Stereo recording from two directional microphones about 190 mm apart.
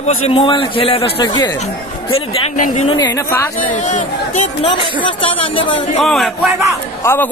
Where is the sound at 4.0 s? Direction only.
30° left (ahead or behind).